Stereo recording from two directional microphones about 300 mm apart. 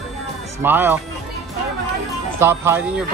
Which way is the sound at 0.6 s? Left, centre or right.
Centre.